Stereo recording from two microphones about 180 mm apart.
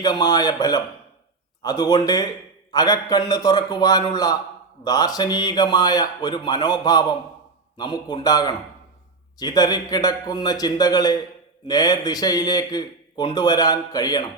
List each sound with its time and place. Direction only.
0.0 s speech: 20° left (ahead or behind)